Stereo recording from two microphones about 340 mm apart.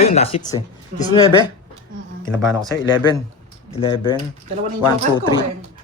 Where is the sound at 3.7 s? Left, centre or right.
Centre.